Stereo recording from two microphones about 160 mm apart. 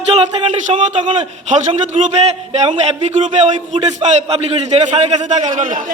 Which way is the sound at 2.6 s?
45° right (ahead or behind).